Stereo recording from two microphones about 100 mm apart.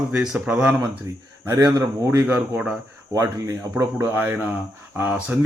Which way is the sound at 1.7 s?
30° right (ahead or behind).